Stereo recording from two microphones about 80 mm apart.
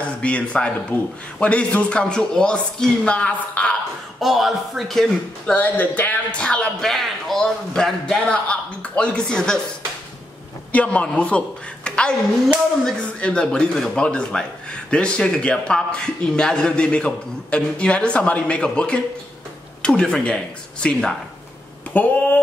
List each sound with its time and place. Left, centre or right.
0.0 s a man's voice: centre
4.2 s speech: centre
5.6 s speech: left
6.4 s a man's voice: centre
10.7 s a woman's voice: centre